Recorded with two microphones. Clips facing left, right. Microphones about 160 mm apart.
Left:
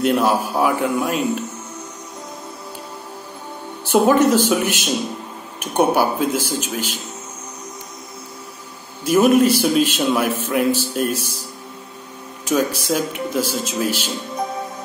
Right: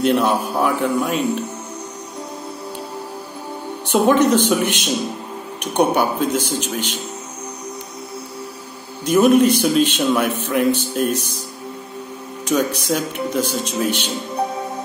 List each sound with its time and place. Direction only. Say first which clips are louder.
0.0 s a man's voice: even; 5° left (ahead or behind)
3.9 s a man's voice: even; 5° left (ahead or behind)
9.0 s a man's voice: right 1 dB; 5° left (ahead or behind)
12.4 s a man's voice: even; 5° left (ahead or behind)